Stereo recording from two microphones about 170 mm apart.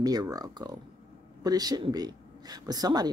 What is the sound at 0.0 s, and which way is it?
Speech, 20° right (ahead or behind).